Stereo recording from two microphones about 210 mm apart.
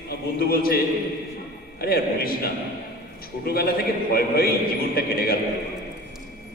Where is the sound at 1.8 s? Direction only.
45° left (ahead or behind).